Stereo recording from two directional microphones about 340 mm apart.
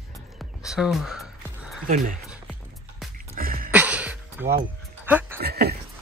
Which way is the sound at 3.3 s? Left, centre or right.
Right.